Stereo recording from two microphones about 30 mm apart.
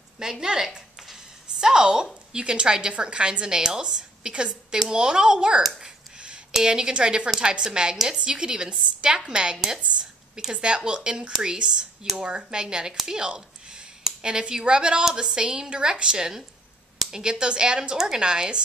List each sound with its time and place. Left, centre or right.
0.2 s a woman's voice: centre
6.6 s a woman's voice: right
9.8 s a woman's voice: right
10.5 s a woman's voice: right
17.9 s a woman's voice: centre